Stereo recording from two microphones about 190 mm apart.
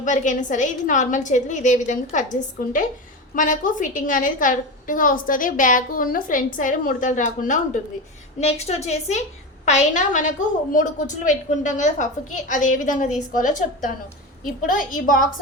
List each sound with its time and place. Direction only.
0.0 s a woman's voice: 40° left (ahead or behind)